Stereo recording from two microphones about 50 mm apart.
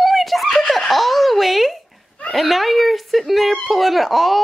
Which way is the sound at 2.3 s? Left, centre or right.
Centre.